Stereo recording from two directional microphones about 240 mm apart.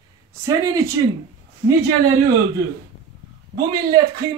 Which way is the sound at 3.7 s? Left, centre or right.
Centre.